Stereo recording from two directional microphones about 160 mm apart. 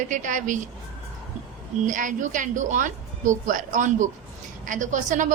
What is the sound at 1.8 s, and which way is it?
A woman's voice, 55° right (ahead or behind).